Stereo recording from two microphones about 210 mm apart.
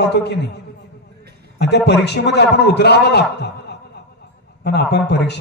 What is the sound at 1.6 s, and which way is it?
A man's voice, 55° left (ahead or behind).